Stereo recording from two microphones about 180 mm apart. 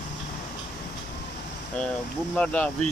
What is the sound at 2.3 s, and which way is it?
Speech, 5° left (ahead or behind).